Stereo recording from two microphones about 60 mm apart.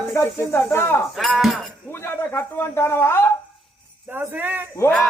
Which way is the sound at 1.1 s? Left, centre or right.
Centre.